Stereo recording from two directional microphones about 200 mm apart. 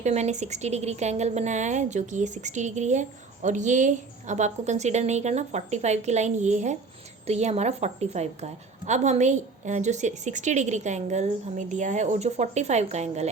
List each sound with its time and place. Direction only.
0.0 s a woman's voice: 35° right (ahead or behind)